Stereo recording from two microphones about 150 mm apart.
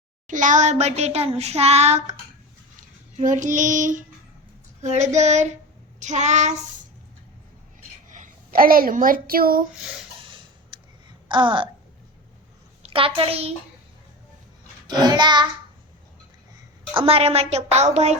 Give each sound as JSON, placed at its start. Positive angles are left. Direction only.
{"t": 0.3, "sound": "child singing", "side_deg": -60}
{"t": 3.2, "sound": "child singing", "side_deg": -55}
{"t": 8.1, "sound": "a woman's voice", "side_deg": -65}
{"t": 10.7, "sound": "a sound", "side_deg": -35}
{"t": 12.8, "sound": "a child's voice", "side_deg": -40}
{"t": 14.8, "sound": "child singing", "side_deg": -30}
{"t": 16.9, "sound": "child singing", "side_deg": -40}